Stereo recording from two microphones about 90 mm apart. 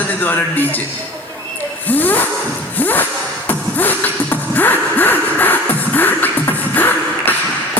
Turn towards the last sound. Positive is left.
turn(degrees=20)  # may be behind; listen again after turning